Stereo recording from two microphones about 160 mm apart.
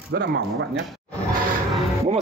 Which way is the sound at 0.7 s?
Centre (ahead or behind).